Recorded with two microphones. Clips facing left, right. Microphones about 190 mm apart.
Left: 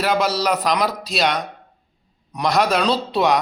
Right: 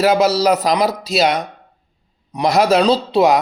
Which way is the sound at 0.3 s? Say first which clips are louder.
Right 5 dB; 40° right (ahead or behind).